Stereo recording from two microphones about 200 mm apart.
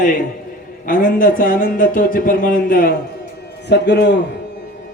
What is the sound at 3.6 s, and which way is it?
Speech, 55° left (ahead or behind).